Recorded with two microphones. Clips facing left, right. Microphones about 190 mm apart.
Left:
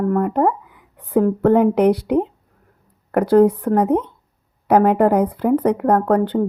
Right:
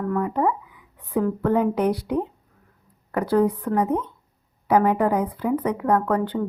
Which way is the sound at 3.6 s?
60° left (ahead or behind).